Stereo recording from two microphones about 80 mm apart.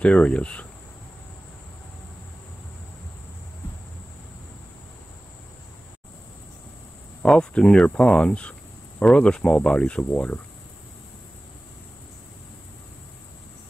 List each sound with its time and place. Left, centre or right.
0.0 s speech: centre
7.2 s speech: centre